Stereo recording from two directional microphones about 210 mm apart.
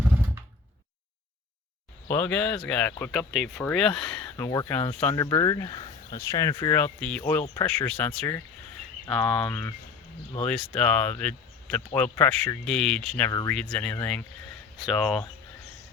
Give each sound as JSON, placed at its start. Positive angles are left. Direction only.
{"t": 2.1, "sound": "speech", "side_deg": 5}
{"t": 4.4, "sound": "speech", "side_deg": 15}
{"t": 7.4, "sound": "speech", "side_deg": 20}
{"t": 7.7, "sound": "speech", "side_deg": 5}
{"t": 9.5, "sound": "speech", "side_deg": 15}
{"t": 10.4, "sound": "speech", "side_deg": 5}